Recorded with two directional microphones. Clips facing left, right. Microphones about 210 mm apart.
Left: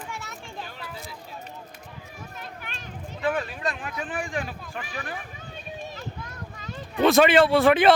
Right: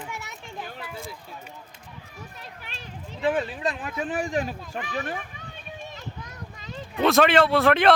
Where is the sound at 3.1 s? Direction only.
25° right (ahead or behind).